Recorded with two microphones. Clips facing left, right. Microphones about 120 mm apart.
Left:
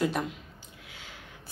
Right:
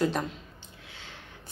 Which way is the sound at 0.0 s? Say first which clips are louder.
Right 1 dB; 5° left (ahead or behind).